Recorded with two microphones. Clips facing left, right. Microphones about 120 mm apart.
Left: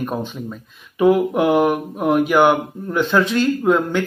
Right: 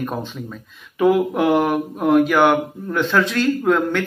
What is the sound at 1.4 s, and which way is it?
Speech, 5° left (ahead or behind).